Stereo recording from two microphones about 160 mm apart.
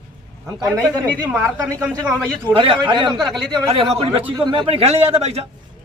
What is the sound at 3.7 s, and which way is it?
A man's voice, 40° right (ahead or behind).